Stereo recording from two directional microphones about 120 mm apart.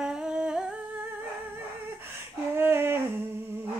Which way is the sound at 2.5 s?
20° right (ahead or behind).